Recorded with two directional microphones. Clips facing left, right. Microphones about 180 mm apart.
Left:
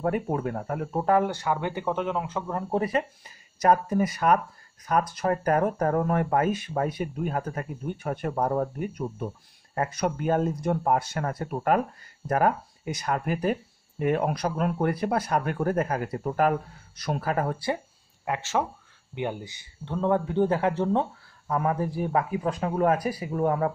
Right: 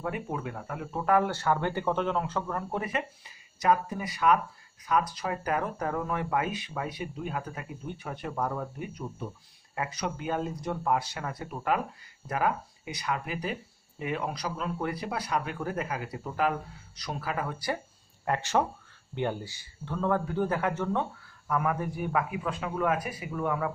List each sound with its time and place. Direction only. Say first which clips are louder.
0.0 s speech: left 7 dB; 45° left (ahead or behind)
1.2 s speech: left 1 dB; 10° left (ahead or behind)
2.5 s speech: left 10 dB; 35° left (ahead or behind)
18.2 s speech: even; 5° left (ahead or behind)
19.1 s speech: even; 15° left (ahead or behind); by 23.7 s 35° left (ahead or behind)